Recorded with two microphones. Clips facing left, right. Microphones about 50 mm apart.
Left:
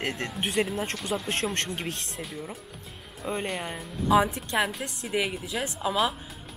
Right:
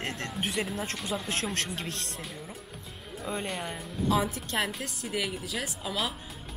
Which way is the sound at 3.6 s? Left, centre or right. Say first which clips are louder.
Left 1 dB; centre.